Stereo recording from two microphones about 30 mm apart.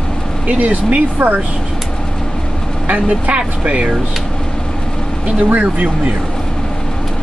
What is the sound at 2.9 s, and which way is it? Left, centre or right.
Speech, right.